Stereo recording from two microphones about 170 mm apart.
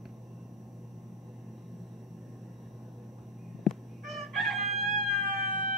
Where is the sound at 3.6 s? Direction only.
Centre (ahead or behind).